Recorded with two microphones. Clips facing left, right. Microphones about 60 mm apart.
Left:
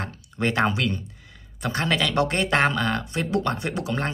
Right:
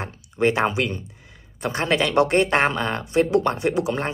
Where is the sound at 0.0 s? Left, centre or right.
Centre.